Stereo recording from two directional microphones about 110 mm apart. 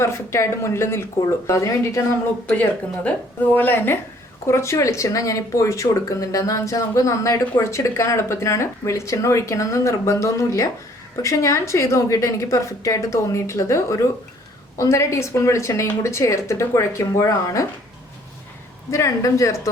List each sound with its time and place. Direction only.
0.0 s speech: 25° left (ahead or behind)
2.6 s speech: 15° left (ahead or behind); by 17.7 s 30° left (ahead or behind)
18.9 s speech: 30° left (ahead or behind)